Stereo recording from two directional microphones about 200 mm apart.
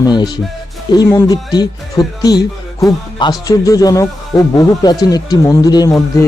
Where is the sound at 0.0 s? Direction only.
20° left (ahead or behind).